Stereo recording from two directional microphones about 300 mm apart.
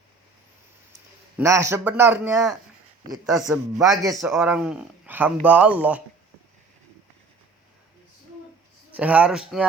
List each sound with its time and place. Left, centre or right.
1.4 s a man's voice: centre
4.1 s speech: centre
9.0 s speech: centre